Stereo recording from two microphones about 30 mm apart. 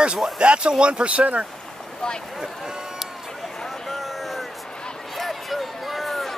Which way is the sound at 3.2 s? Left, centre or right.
Centre.